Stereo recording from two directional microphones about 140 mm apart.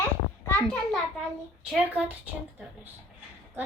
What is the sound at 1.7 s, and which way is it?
Speech, 5° right (ahead or behind).